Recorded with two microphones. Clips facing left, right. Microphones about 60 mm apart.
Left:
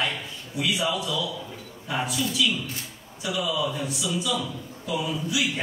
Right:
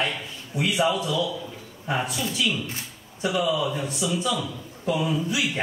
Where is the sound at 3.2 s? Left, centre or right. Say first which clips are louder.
Right 4 dB; right.